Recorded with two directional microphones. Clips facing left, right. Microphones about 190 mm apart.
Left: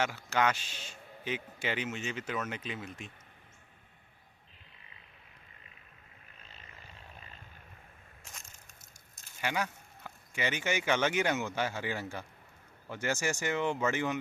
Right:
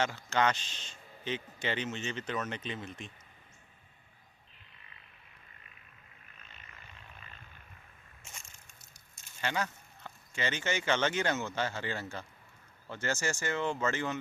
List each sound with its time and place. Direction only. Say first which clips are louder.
0.0 s speech: even; 10° left (ahead or behind)
6.4 s vehicle: left 2 dB; 35° left (ahead or behind)
9.4 s speech: even; 10° left (ahead or behind)